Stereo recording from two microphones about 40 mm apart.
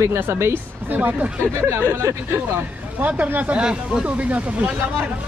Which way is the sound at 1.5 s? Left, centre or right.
Right.